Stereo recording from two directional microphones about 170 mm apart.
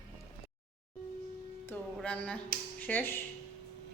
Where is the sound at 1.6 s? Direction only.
10° left (ahead or behind).